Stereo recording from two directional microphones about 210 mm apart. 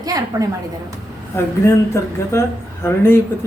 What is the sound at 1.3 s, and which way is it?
A woman's voice, 10° left (ahead or behind).